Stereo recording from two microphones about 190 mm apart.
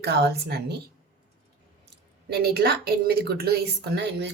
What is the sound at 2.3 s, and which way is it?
A woman's voice, 55° right (ahead or behind).